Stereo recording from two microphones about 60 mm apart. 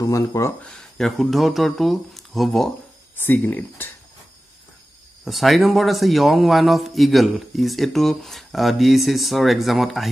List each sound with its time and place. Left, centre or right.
0.0 s speech: left
0.7 s a man's voice: centre
3.2 s speech: left
5.2 s a man's voice: centre